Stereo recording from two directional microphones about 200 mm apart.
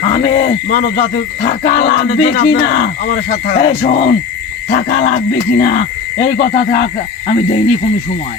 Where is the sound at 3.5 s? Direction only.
40° left (ahead or behind).